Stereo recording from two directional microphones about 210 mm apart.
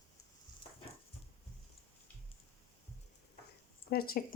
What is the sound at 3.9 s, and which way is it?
Speech, 45° left (ahead or behind).